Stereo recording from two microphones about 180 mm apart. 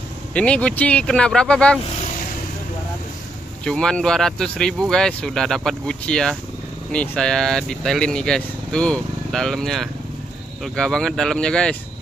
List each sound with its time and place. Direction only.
0.3 s speech: 5° left (ahead or behind)
3.6 s speech: 5° left (ahead or behind)